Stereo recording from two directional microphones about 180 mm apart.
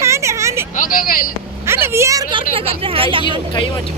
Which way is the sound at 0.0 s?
15° right (ahead or behind).